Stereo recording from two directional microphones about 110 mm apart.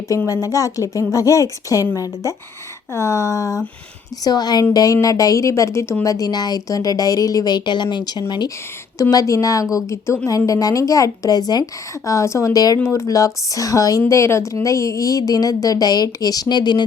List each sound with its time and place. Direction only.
0.3 s speech: 30° left (ahead or behind)
2.9 s a sound: 25° left (ahead or behind)
4.2 s speech: 40° left (ahead or behind)